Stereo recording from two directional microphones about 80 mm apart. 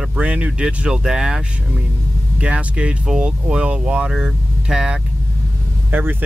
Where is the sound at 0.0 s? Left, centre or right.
Centre.